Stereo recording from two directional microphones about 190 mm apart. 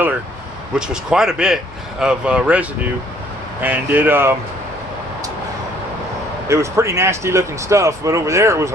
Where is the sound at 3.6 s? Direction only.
10° right (ahead or behind).